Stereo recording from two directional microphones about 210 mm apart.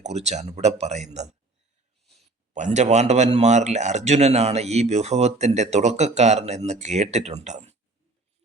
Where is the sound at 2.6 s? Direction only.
35° right (ahead or behind).